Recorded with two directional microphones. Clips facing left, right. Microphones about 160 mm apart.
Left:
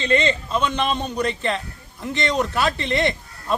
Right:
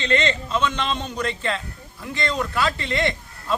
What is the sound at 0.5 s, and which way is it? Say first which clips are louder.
A man's voice: left 2 dB; 15° left (ahead or behind).